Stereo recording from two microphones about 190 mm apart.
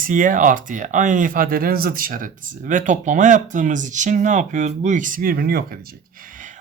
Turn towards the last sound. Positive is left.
turn(degrees=-45)  # may be behind; listen again after turning